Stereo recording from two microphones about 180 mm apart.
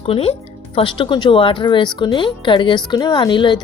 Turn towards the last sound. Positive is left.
turn(degrees=25)  # may be behind; listen again after turning